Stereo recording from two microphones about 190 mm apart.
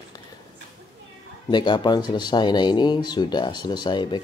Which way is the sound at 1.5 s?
25° left (ahead or behind).